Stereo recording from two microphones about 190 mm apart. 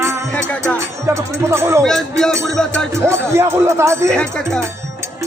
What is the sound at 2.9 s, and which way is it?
Speech, 15° right (ahead or behind).